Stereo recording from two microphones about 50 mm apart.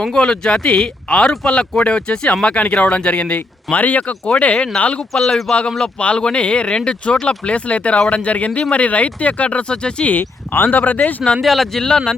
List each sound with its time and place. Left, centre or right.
0.0 s speech: centre
5.1 s speech: centre
6.0 s speech: centre
10.1 s speech: left
11.4 s speech: centre